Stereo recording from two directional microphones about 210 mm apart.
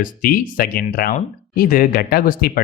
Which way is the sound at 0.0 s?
45° left (ahead or behind).